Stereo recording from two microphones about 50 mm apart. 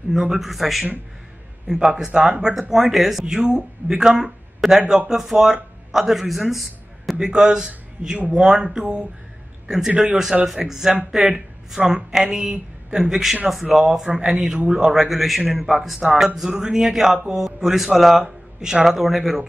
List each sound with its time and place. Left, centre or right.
0.2 s a man's voice: centre
1.7 s speech: centre
2.7 s a man's voice: centre
7.2 s a man's voice: centre
14.0 s speech: centre
15.0 s a man's voice: centre
18.2 s speech: centre